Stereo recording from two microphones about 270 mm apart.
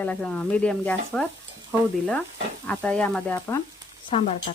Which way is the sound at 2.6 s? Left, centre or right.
Centre.